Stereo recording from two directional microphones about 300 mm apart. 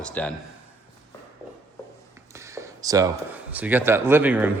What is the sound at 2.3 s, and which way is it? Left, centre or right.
A man's voice, centre.